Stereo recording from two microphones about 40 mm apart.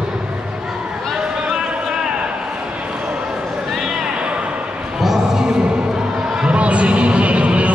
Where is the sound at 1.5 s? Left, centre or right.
Centre.